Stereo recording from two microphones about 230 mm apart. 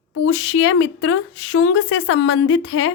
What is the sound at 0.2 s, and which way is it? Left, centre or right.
A woman's voice, left.